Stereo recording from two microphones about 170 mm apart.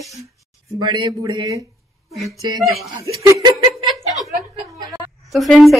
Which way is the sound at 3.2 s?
25° right (ahead or behind).